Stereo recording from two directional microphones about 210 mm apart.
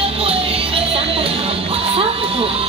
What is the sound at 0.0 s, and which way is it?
Music, 25° right (ahead or behind).